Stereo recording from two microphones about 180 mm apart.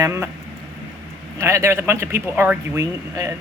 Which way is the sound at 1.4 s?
15° right (ahead or behind).